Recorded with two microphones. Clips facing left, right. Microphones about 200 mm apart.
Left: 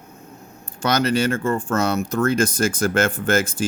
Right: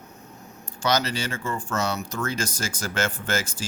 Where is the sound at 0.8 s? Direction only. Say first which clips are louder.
Left 6 dB; 55° left (ahead or behind).